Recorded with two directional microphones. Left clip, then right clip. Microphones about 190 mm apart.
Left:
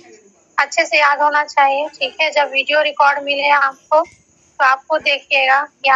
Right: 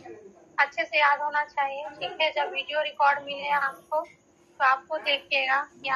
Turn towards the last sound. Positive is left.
turn(degrees=45)  # may be behind; listen again after turning